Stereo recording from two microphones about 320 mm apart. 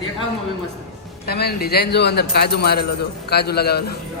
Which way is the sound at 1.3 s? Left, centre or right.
Left.